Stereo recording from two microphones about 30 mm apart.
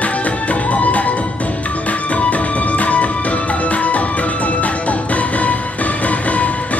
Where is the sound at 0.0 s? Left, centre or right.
Left.